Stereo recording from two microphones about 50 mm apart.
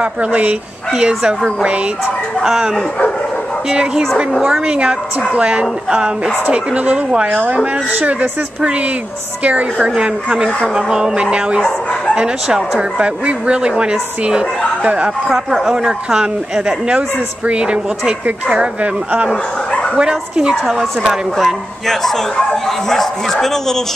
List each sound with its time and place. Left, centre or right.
0.0 s speech: right
0.9 s speech: centre
2.4 s speech: centre; by 9.8 s right
9.8 s speech: centre
11.6 s bow-wow: centre
12.2 s speech: centre
13.0 s speech: right
15.2 s speech: centre
19.3 s dog: centre
20.0 s speech: centre
21.8 s speech: centre